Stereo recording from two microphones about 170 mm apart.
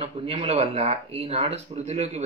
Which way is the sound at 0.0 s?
30° right (ahead or behind).